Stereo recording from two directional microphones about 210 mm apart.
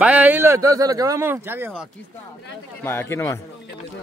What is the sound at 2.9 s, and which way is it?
Speech, 10° left (ahead or behind).